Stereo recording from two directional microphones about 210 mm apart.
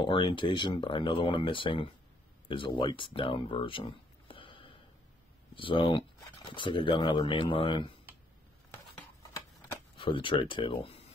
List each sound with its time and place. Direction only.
0.0 s speech: 20° left (ahead or behind)
9.9 s speech: 25° left (ahead or behind)